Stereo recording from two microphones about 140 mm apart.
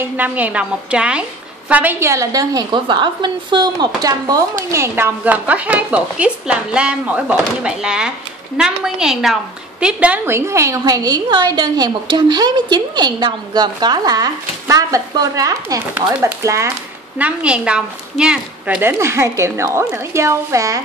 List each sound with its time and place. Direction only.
0.2 s a woman's voice: 10° right (ahead or behind)
17.2 s a woman's voice: 10° right (ahead or behind)